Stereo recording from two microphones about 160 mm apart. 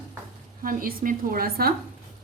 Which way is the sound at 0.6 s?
60° right (ahead or behind).